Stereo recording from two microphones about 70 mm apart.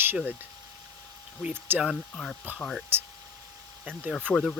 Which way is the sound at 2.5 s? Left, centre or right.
Right.